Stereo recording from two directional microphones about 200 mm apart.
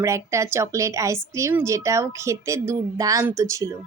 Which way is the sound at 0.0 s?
15° right (ahead or behind).